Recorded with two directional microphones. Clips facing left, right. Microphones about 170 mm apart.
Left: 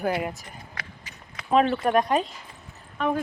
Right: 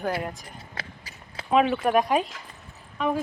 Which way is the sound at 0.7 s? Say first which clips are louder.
Right 2 dB; 30° right (ahead or behind).